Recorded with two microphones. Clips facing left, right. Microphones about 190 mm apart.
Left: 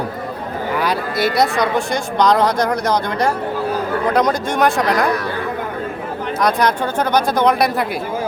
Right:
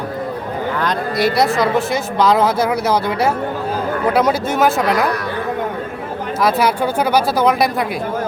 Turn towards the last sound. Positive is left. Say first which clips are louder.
# even
turn(degrees=0)  # may be behind; listen again after turning